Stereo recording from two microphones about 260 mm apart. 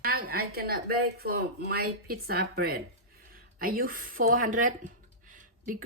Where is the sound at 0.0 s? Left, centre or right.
Right.